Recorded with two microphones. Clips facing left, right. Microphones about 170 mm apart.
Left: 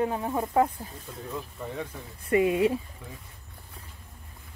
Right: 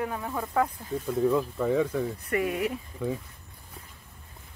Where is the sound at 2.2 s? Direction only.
25° left (ahead or behind).